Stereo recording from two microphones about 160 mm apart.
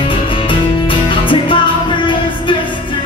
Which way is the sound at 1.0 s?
30° left (ahead or behind).